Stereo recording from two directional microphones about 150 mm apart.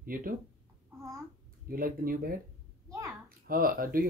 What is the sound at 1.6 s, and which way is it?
Speech, 75° right (ahead or behind).